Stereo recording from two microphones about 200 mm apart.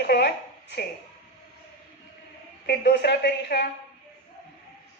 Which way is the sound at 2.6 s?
55° left (ahead or behind).